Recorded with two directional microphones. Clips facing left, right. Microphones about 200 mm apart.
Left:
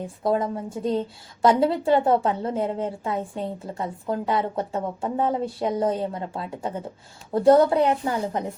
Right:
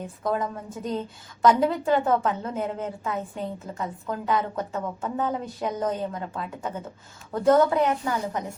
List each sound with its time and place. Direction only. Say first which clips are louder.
0.2 s a woman's voice: left 4 dB; 30° left (ahead or behind)